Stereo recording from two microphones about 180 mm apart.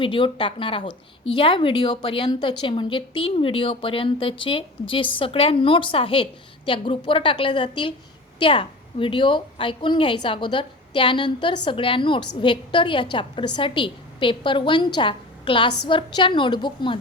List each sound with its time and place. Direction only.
0.0 s a woman's voice: 30° left (ahead or behind)